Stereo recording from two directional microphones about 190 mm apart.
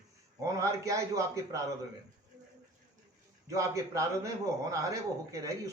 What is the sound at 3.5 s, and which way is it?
A man's voice, 15° right (ahead or behind).